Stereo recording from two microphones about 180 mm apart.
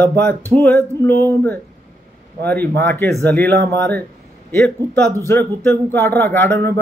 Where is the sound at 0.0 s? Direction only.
10° left (ahead or behind).